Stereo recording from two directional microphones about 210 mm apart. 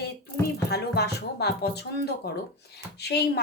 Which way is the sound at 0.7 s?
50° left (ahead or behind).